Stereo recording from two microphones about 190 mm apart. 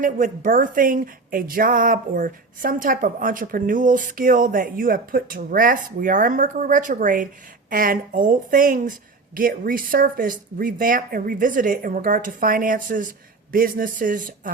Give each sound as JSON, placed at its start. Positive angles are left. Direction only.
{"t": 0.0, "sound": "a woman's voice", "side_deg": -45}